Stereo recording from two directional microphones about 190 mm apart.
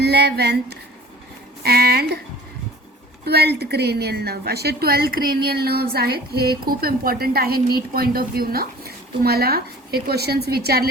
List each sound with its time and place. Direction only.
0.0 s a woman's voice: 60° right (ahead or behind)
3.2 s a woman's voice: 60° right (ahead or behind)